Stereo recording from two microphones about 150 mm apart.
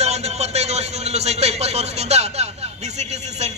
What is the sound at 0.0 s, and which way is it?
A man's voice, 45° right (ahead or behind).